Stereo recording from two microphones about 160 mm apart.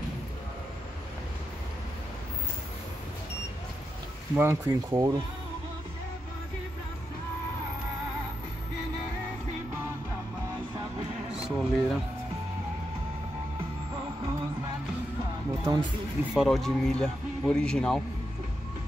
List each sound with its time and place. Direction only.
4.4 s speech: 15° right (ahead or behind)
11.4 s music: centre (ahead or behind)
15.6 s speech: 25° right (ahead or behind)
16.3 s speech: centre (ahead or behind)